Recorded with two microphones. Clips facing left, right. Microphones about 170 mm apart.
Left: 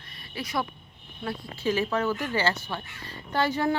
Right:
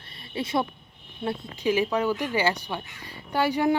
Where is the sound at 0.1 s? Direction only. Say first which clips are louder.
Right 5 dB; 25° right (ahead or behind).